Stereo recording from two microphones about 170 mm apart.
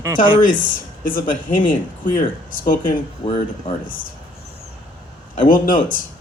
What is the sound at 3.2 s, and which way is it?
Speech, 30° left (ahead or behind).